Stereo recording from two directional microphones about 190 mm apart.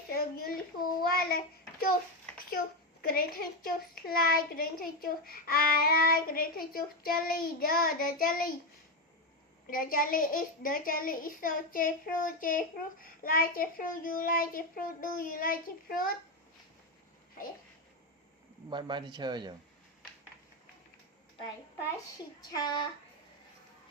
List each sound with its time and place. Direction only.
0.1 s a sound: 55° left (ahead or behind)
1.0 s child singing: 55° left (ahead or behind)
3.0 s a child's voice: 50° left (ahead or behind)
9.6 s a child's voice: 50° left (ahead or behind)
18.7 s speech: 25° right (ahead or behind)
22.4 s speech: 20° left (ahead or behind)